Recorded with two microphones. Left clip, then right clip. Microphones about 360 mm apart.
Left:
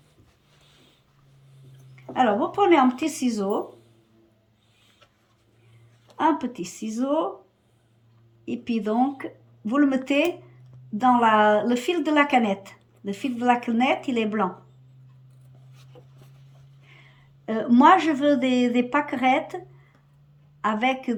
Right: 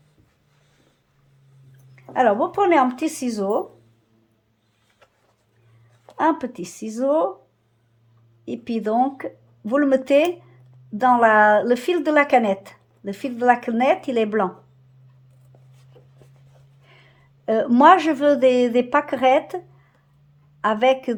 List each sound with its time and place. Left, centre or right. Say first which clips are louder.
2.0 s a woman's voice: right 4 dB; centre
6.1 s a woman's voice: right 2 dB; centre
8.4 s a woman's voice: right 3 dB; centre
16.9 s a woman's voice: even; centre